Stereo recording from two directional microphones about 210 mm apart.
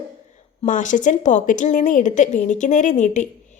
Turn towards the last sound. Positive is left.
turn(degrees=35)  # may be behind; listen again after turning